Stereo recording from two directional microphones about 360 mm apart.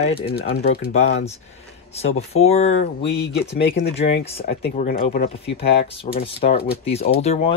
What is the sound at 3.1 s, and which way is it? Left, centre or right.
Speech, left.